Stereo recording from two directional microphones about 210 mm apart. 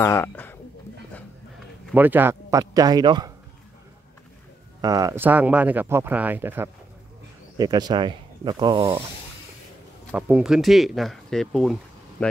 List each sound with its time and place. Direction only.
0.0 s speech: 10° left (ahead or behind)
1.9 s speech: 10° right (ahead or behind)
4.8 s speech: 15° right (ahead or behind)
10.1 s speech: 5° right (ahead or behind)